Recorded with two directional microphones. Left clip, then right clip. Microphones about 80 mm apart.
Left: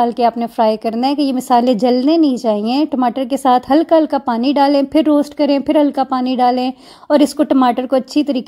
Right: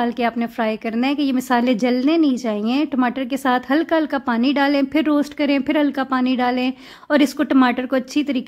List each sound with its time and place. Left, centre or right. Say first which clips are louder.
0.0 s a woman's voice: left 7 dB; left
2.9 s a woman's voice: left 5 dB; left